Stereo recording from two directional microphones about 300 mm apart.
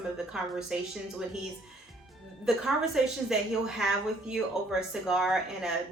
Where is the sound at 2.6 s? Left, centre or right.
Centre.